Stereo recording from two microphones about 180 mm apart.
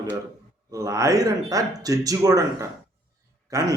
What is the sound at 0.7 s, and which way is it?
Speech, 15° right (ahead or behind).